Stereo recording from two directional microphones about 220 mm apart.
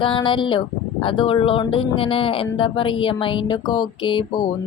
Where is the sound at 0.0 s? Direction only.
20° left (ahead or behind).